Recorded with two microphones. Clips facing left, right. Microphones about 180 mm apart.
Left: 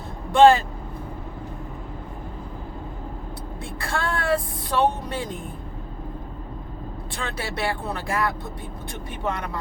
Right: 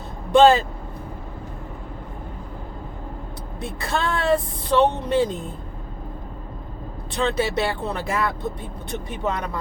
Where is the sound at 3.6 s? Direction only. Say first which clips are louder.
Right 3 dB; 20° right (ahead or behind).